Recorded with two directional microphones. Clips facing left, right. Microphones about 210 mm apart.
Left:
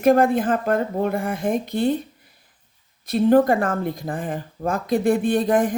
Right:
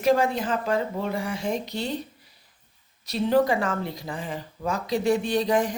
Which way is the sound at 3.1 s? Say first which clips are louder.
Left 6 dB; 50° left (ahead or behind).